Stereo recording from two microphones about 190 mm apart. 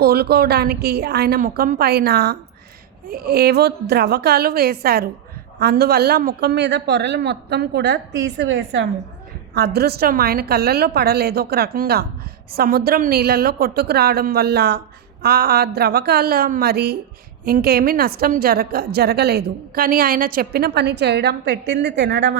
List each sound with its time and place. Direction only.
0.0 s a woman's voice: 55° right (ahead or behind); by 8.9 s 70° right (ahead or behind)
9.6 s a woman's voice: 60° right (ahead or behind)